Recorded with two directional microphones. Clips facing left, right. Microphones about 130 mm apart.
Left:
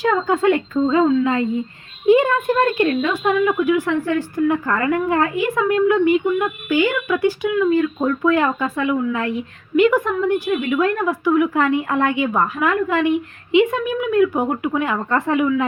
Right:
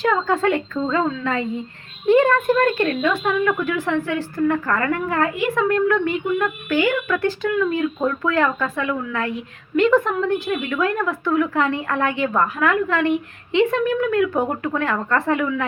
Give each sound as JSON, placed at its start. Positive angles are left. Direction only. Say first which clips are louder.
{"t": 0.0, "sound": "a woman's voice", "louder": "left 2 dB", "side_deg": 15}